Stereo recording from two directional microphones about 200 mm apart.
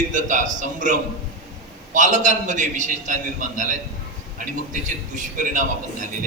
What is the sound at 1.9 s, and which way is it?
A man's voice, 40° right (ahead or behind).